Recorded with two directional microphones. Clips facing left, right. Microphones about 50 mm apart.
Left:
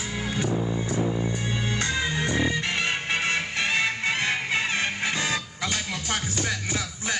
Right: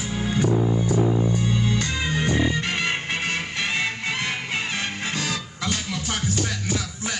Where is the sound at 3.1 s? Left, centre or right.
Left.